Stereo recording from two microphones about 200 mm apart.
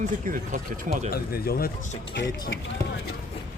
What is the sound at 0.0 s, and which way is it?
Speech, 45° right (ahead or behind).